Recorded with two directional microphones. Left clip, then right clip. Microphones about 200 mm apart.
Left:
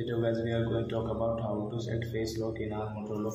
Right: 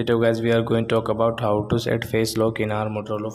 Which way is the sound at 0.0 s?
40° right (ahead or behind).